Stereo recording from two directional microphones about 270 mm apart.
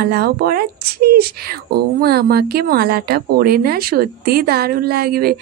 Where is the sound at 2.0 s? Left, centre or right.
Right.